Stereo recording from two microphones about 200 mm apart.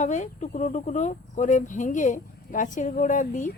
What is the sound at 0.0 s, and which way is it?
Speech, 35° left (ahead or behind).